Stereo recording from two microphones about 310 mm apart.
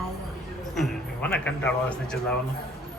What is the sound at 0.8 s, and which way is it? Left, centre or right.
Music, centre.